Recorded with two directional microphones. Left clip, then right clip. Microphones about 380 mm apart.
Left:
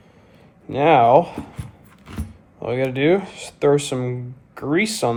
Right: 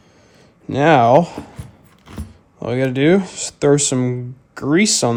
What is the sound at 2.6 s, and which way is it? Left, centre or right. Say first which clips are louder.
Speech: right 3 dB; right.